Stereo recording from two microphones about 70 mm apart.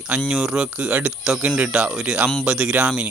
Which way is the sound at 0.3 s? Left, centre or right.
Centre.